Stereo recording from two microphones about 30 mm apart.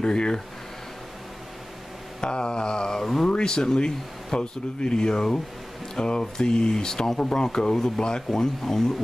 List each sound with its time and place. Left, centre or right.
0.0 s speech: left
2.1 s speech: left
3.0 s speech: centre
3.3 s speech: left; by 8.9 s centre